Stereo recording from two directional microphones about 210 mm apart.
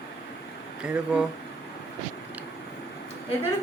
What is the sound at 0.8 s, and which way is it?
Speech, 5° right (ahead or behind).